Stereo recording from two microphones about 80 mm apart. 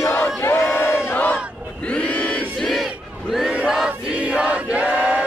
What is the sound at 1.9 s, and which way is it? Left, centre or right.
Crowd, centre.